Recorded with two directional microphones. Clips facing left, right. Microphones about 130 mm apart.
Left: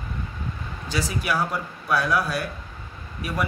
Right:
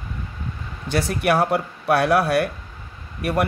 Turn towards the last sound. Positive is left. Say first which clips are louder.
# right 7 dB
turn(degrees=-65)  # may be behind; listen again after turning